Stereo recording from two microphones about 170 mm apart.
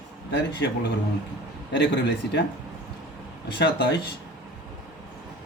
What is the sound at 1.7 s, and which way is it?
Speech, 80° left.